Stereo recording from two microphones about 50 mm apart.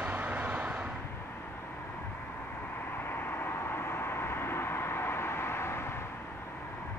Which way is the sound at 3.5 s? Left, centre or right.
Left.